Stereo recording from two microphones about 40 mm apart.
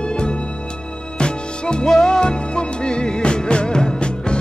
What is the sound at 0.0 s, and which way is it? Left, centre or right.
Music, left.